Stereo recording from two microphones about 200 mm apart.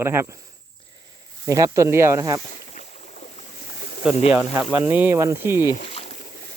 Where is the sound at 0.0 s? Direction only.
10° right (ahead or behind).